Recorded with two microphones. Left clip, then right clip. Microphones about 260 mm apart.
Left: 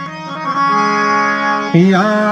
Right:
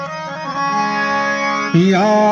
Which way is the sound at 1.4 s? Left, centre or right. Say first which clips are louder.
Left 3 dB; right.